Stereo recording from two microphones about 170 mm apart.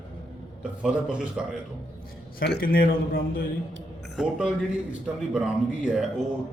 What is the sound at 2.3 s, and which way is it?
A man's voice, 70° left (ahead or behind).